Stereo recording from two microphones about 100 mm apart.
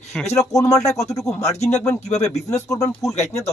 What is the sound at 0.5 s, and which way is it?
Speech, 90° left.